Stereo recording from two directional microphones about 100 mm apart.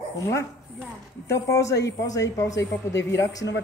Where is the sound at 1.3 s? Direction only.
30° left (ahead or behind).